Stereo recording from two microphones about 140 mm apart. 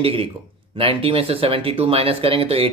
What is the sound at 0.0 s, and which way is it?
Speech, 40° right (ahead or behind).